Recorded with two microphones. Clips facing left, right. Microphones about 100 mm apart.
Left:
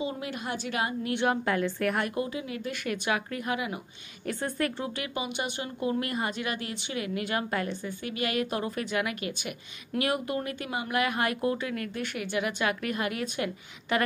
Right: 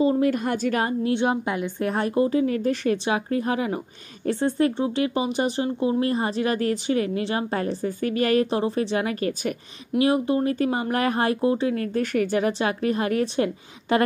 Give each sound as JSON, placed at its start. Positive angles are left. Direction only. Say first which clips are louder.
{"t": 0.0, "sound": "a woman's voice", "louder": "right 13 dB", "side_deg": -45}
{"t": 1.0, "sound": "speech", "louder": "right 4 dB", "side_deg": -20}
{"t": 4.3, "sound": "speech", "louder": "right 9 dB", "side_deg": -25}
{"t": 9.9, "sound": "speech", "louder": "right 8 dB", "side_deg": -25}